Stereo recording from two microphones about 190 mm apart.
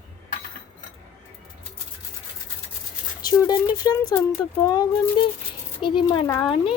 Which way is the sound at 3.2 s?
20° left (ahead or behind).